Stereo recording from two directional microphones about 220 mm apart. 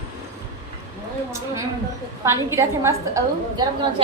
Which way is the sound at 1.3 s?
15° right (ahead or behind).